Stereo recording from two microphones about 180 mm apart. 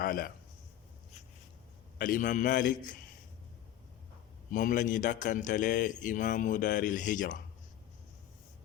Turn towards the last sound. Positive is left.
turn(degrees=45)  # may be behind; listen again after turning